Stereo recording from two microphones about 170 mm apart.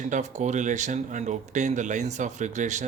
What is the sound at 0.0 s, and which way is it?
Speech, 45° right (ahead or behind).